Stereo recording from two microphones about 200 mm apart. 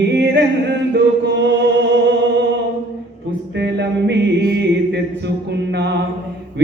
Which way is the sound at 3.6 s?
60° right (ahead or behind).